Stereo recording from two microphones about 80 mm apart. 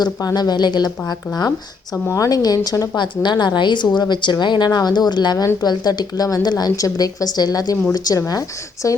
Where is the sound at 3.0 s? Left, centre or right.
Left.